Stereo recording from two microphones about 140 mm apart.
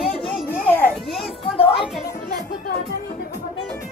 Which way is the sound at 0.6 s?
10° left (ahead or behind).